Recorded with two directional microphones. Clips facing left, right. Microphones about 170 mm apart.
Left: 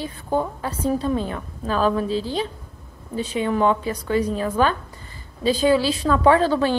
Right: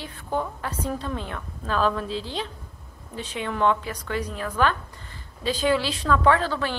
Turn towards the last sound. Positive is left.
turn(degrees=20)  # may be behind; listen again after turning